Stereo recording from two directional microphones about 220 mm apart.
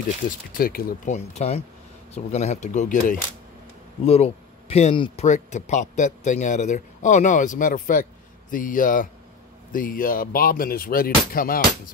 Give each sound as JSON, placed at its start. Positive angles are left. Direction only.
{"t": 0.6, "sound": "speech", "side_deg": 40}